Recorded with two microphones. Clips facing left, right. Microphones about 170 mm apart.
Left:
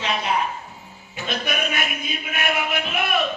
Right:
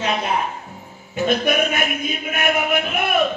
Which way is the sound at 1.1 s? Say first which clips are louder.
Right 9 dB; 50° right (ahead or behind).